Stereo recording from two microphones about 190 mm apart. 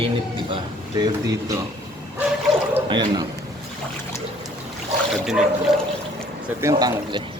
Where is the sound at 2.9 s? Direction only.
25° right (ahead or behind).